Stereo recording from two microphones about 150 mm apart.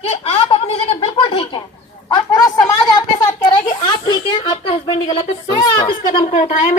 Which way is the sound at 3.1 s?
25° left (ahead or behind).